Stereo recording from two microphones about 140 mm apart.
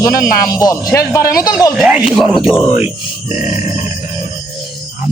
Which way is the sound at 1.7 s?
5° right (ahead or behind).